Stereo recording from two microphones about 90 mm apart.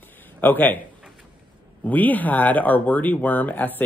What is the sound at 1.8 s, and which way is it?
Speech, 20° left (ahead or behind).